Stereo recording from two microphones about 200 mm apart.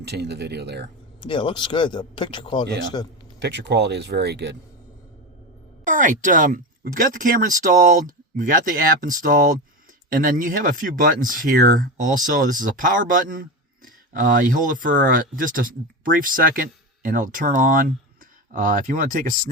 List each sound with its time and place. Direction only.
0.0 s speech: 55° right (ahead or behind)
1.2 s speech: 25° left (ahead or behind)
3.4 s speech: 60° right (ahead or behind)
5.8 s speech: 40° right (ahead or behind)